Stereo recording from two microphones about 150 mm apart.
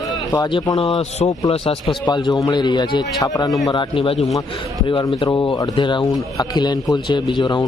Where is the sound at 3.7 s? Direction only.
35° left (ahead or behind).